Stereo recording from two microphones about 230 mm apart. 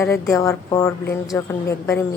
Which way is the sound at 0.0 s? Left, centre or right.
Centre.